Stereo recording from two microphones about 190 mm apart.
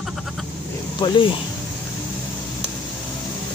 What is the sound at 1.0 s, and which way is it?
Speech, 25° left (ahead or behind).